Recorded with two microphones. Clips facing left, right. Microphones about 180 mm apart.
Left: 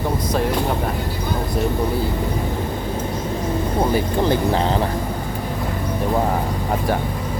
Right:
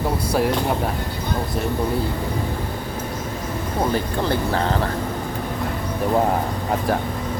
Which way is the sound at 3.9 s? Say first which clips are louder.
Left 3 dB; 15° left (ahead or behind).